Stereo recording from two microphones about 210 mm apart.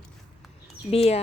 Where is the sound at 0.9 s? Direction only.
30° left (ahead or behind).